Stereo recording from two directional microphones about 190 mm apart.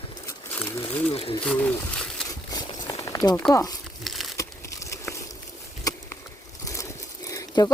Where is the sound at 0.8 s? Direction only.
30° left (ahead or behind).